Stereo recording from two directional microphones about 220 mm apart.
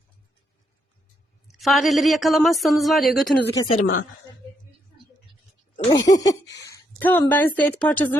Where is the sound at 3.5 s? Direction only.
20° left (ahead or behind).